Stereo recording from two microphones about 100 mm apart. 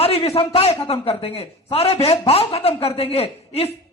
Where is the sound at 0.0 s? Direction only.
75° left (ahead or behind).